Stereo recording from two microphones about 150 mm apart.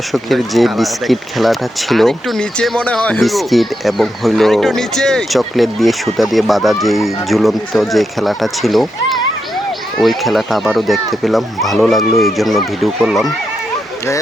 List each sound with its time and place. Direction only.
0.1 s speech: centre (ahead or behind)